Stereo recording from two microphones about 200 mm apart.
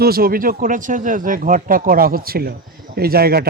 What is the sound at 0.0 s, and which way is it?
Speech, 50° right (ahead or behind).